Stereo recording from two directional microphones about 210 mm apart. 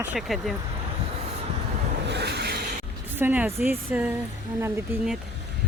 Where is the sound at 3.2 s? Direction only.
10° right (ahead or behind).